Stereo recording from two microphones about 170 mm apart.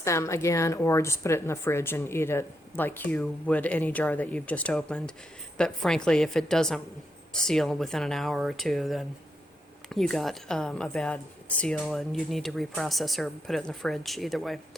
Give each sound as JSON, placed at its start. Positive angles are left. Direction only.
{"t": 0.0, "sound": "a woman's voice", "side_deg": 15}